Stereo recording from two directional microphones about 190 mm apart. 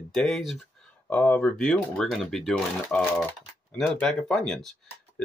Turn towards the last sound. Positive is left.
turn(degrees=0)  # may be behind; listen again after turning